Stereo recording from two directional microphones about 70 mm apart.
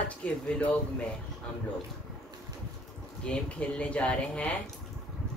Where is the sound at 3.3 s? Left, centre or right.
Centre.